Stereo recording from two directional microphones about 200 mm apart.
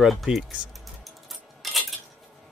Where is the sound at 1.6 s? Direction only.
Centre (ahead or behind).